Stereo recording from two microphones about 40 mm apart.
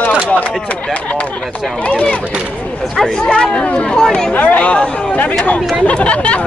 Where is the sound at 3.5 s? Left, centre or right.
Left.